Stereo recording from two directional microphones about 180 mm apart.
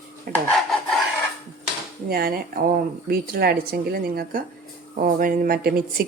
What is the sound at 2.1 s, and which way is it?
Speech, 55° right (ahead or behind).